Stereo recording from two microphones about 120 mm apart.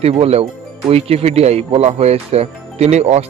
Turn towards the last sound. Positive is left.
turn(degrees=-65)  # may be behind; listen again after turning